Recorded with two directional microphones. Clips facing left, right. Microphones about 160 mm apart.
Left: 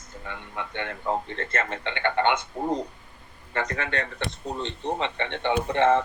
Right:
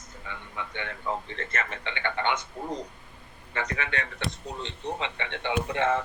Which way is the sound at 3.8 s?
35° left (ahead or behind).